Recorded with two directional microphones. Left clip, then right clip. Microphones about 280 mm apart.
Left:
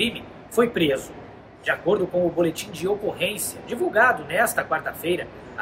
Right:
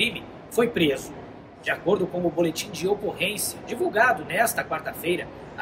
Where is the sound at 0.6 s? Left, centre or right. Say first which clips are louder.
Left 2 dB; centre.